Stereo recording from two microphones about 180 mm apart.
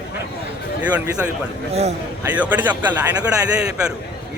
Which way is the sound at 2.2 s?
10° right (ahead or behind).